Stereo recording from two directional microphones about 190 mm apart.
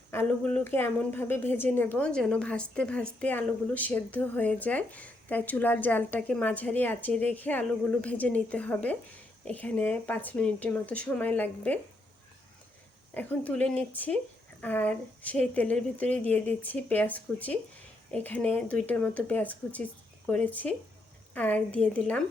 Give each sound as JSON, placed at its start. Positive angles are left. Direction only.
{"t": 0.1, "sound": "a woman's voice", "side_deg": 10}
{"t": 13.1, "sound": "a woman's voice", "side_deg": 10}